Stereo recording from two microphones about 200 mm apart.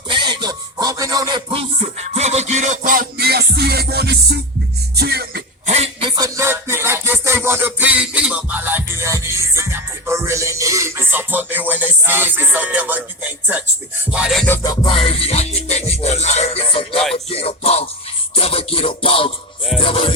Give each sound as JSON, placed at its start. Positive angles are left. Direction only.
{"t": 0.1, "sound": "music", "side_deg": -25}
{"t": 5.6, "sound": "music", "side_deg": -30}
{"t": 14.1, "sound": "music", "side_deg": -5}